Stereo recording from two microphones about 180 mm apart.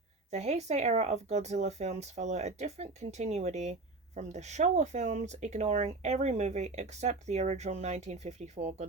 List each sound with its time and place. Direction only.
0.3 s speech: 40° right (ahead or behind)